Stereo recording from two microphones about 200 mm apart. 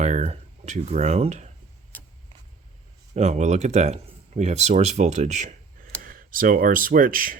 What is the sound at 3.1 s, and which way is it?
Speech, 35° right (ahead or behind).